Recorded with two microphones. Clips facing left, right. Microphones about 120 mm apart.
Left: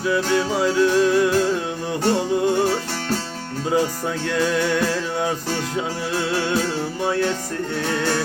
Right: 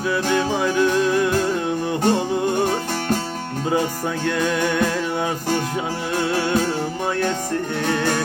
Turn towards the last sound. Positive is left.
turn(degrees=-25)  # may be behind; listen again after turning